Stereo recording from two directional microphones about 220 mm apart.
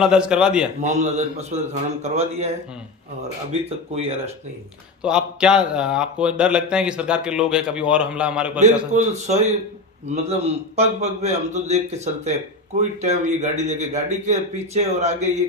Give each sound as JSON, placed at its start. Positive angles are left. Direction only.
{"t": 0.0, "sound": "a man's voice", "side_deg": -5}
{"t": 0.8, "sound": "a man's voice", "side_deg": -30}
{"t": 3.6, "sound": "a man's voice", "side_deg": -30}
{"t": 5.0, "sound": "a man's voice", "side_deg": -5}
{"t": 8.9, "sound": "a man's voice", "side_deg": -30}